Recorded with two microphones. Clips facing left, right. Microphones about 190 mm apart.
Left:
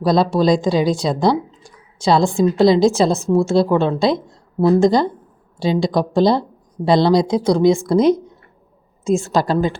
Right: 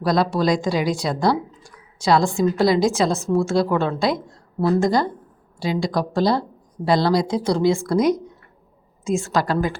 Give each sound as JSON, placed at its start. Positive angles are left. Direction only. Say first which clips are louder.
{"t": 0.0, "sound": "speech", "louder": "left 4 dB", "side_deg": 25}